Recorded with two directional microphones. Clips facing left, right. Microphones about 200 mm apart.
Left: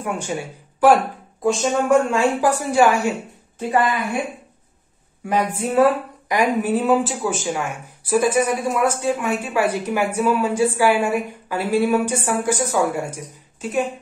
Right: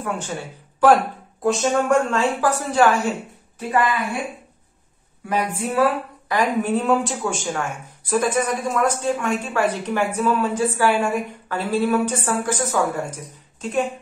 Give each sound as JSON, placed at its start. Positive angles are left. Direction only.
{"t": 0.0, "sound": "speech", "side_deg": 15}
{"t": 1.4, "sound": "speech", "side_deg": 0}
{"t": 5.6, "sound": "speech", "side_deg": 25}
{"t": 6.3, "sound": "speech", "side_deg": 5}